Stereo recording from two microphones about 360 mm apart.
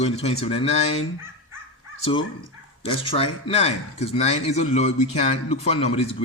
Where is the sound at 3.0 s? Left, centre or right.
Centre.